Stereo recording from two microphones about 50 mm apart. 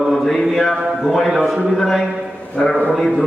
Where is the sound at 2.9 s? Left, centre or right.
Centre.